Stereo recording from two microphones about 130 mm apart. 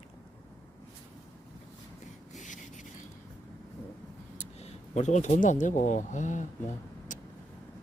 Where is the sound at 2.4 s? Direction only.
70° left (ahead or behind).